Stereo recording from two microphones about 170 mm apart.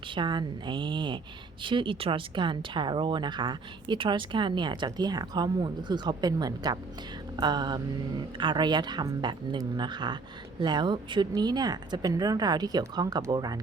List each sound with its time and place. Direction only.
0.1 s speech: 25° right (ahead or behind)